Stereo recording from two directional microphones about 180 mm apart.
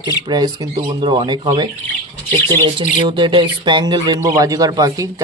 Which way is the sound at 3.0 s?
25° right (ahead or behind).